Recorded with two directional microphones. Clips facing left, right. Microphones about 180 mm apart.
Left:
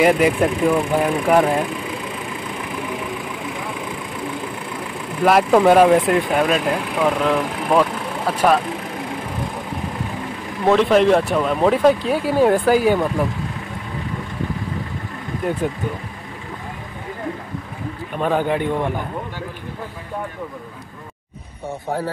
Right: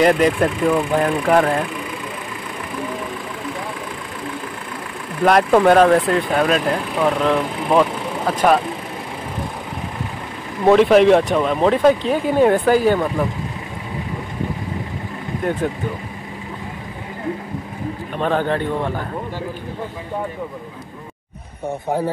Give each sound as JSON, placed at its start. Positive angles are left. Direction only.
{"t": 0.0, "sound": "speech", "side_deg": 10}
{"t": 5.2, "sound": "speech", "side_deg": 5}
{"t": 10.6, "sound": "speech", "side_deg": -5}
{"t": 18.1, "sound": "speech", "side_deg": 10}
{"t": 21.6, "sound": "speech", "side_deg": -15}